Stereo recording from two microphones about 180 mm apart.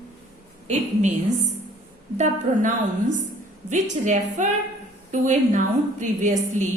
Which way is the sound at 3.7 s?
40° right (ahead or behind).